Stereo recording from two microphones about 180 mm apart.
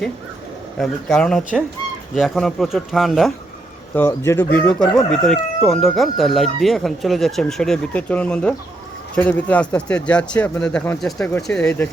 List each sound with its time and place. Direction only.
0.8 s speech: 5° left (ahead or behind)
3.9 s speech: 15° left (ahead or behind)